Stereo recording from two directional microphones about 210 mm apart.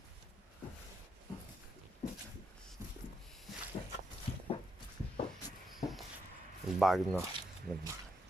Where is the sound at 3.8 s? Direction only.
20° left (ahead or behind).